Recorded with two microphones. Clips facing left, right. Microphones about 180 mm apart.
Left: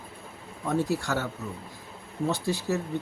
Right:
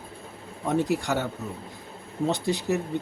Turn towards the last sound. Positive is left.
turn(degrees=-20)  # may be behind; listen again after turning